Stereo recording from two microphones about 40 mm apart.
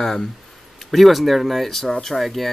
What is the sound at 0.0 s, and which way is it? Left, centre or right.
Speech, centre.